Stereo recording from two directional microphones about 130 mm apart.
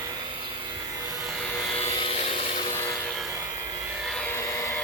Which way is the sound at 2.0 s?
50° left (ahead or behind).